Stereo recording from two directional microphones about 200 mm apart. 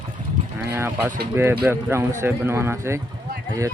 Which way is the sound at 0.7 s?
10° right (ahead or behind).